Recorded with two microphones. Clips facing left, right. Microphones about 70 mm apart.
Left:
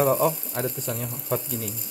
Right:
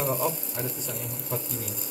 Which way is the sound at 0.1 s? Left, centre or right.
Left.